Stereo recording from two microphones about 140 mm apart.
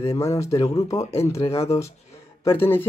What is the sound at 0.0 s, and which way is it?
Speech, 20° left (ahead or behind).